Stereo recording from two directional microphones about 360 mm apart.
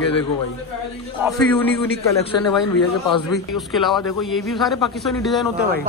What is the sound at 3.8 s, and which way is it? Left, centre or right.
A man's voice, centre.